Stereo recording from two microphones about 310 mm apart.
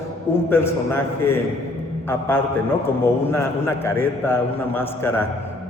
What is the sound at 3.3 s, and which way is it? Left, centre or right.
A man's voice, centre.